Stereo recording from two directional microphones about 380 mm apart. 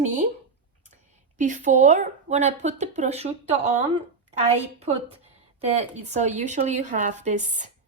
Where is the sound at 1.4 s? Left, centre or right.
Centre.